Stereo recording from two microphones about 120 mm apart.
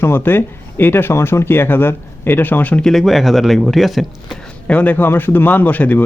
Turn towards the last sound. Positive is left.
turn(degrees=15)  # may be behind; listen again after turning